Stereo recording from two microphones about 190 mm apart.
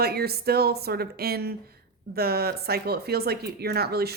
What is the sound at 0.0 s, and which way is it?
Speech, 55° right (ahead or behind).